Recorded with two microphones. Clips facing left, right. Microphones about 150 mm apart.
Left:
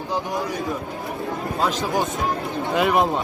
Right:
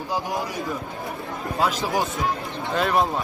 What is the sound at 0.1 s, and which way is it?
Speech, centre (ahead or behind).